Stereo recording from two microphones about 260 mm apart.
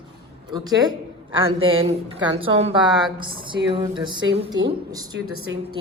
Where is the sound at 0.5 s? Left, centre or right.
Centre.